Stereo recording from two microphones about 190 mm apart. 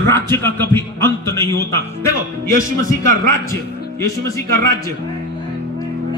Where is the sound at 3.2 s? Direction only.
15° left (ahead or behind).